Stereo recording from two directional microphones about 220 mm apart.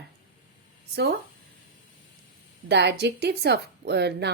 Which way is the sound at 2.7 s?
50° right (ahead or behind).